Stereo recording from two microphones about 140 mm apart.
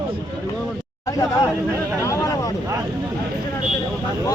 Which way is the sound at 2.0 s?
20° left (ahead or behind).